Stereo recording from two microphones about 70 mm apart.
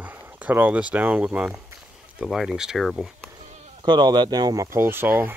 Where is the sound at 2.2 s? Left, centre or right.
Centre.